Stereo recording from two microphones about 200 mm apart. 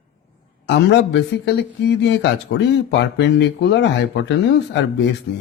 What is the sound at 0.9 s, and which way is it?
Speech, 60° left (ahead or behind).